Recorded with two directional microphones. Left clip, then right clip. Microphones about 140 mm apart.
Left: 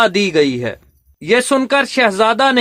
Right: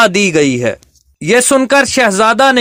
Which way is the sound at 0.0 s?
30° right (ahead or behind).